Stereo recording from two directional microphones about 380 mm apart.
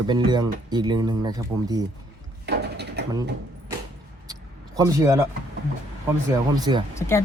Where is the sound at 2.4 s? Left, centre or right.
Right.